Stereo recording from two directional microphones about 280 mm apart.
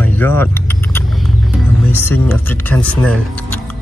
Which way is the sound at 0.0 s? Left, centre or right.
Centre.